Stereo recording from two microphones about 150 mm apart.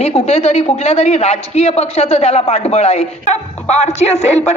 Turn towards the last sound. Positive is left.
turn(degrees=50)  # may be behind; listen again after turning